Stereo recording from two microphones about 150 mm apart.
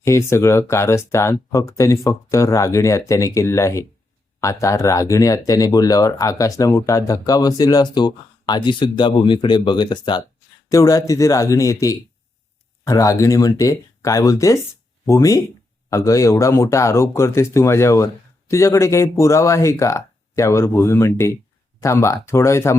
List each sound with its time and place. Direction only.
0.0 s speech: 20° left (ahead or behind)